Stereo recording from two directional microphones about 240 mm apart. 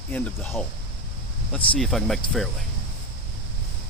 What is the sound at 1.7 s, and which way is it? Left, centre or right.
Speech, centre.